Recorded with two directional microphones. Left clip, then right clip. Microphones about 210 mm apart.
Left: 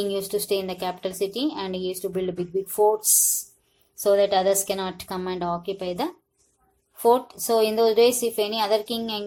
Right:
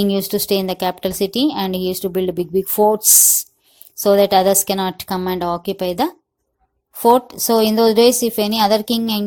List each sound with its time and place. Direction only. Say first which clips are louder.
0.0 s speech: right 6 dB; 45° right (ahead or behind)